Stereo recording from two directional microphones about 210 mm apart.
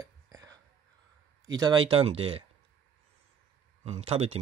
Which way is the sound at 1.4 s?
20° right (ahead or behind).